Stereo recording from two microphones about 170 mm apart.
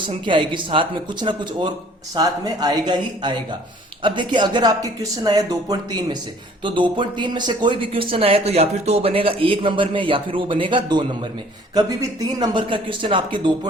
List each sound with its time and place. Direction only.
0.0 s speech: 30° right (ahead or behind)